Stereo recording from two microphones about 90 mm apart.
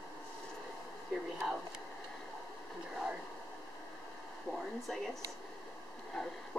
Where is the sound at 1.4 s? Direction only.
5° right (ahead or behind).